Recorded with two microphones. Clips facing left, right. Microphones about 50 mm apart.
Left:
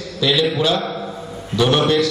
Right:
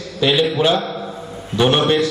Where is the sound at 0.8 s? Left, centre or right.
Centre.